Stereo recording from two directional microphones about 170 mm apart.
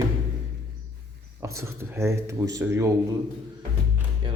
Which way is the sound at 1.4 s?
15° right (ahead or behind).